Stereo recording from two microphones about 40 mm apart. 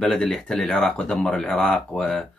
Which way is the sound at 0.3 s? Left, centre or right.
Centre.